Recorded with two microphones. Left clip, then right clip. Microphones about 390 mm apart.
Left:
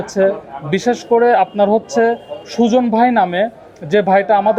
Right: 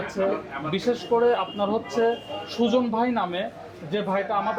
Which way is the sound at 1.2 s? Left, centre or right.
Left.